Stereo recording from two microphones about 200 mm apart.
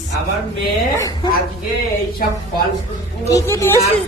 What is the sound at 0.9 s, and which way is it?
Speech, 15° left (ahead or behind).